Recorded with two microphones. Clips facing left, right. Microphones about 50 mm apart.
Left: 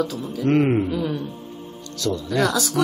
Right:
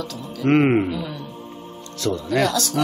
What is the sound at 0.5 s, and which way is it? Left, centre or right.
Speech, right.